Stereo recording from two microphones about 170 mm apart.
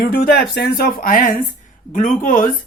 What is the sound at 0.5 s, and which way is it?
Speech, 65° left (ahead or behind).